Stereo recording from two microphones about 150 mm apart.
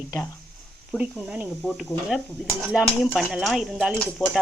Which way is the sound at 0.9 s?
10° right (ahead or behind).